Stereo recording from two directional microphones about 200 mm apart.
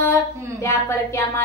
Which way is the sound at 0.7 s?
15° left (ahead or behind).